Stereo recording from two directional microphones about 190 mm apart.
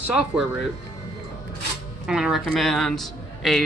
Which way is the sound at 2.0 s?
5° right (ahead or behind).